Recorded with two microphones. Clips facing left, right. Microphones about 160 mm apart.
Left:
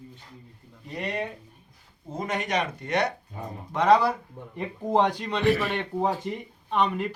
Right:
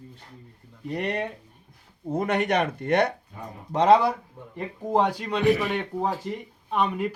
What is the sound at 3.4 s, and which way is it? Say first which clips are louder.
Speech: left 2 dB; 25° left (ahead or behind).